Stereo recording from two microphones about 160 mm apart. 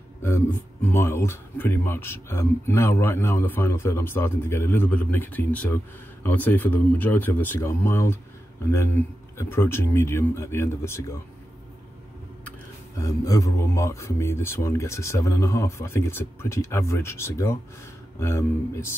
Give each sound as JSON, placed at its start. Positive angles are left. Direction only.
{"t": 0.2, "sound": "speech", "side_deg": 15}
{"t": 13.0, "sound": "speech", "side_deg": 20}